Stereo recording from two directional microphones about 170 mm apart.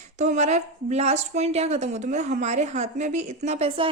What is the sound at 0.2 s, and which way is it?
A woman's voice, 40° right (ahead or behind).